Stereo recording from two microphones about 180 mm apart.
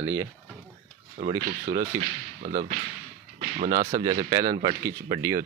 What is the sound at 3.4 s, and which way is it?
Music, 45° right (ahead or behind).